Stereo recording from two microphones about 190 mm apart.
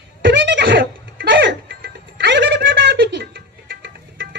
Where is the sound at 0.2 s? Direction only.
65° right (ahead or behind).